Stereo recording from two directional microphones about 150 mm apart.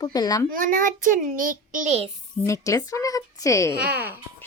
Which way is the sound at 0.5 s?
65° right (ahead or behind).